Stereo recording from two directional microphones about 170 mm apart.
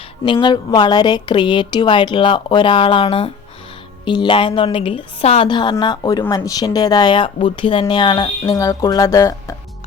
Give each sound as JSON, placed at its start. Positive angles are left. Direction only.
{"t": 0.3, "sound": "speech", "side_deg": 30}